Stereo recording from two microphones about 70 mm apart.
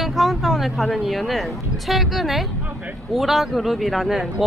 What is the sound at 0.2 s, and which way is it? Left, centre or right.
Speech, centre.